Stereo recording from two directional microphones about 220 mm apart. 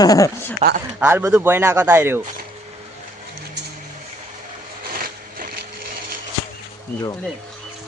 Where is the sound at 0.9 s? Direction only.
10° right (ahead or behind).